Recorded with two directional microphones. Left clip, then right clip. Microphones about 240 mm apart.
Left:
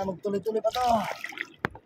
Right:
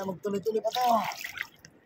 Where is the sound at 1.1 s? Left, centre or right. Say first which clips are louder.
Left 2 dB; centre.